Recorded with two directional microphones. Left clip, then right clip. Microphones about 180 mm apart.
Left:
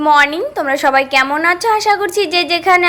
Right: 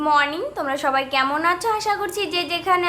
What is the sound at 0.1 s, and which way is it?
A woman's voice, 30° left (ahead or behind).